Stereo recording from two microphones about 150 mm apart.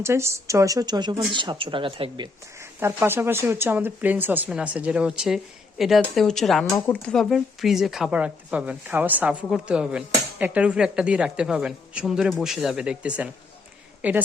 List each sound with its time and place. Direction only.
0.0 s a woman's voice: 20° right (ahead or behind); by 2.3 s 35° right (ahead or behind)
2.8 s speech: 15° right (ahead or behind); by 6.7 s centre (ahead or behind)
6.7 s speech: 15° left (ahead or behind)
7.1 s speech: centre (ahead or behind)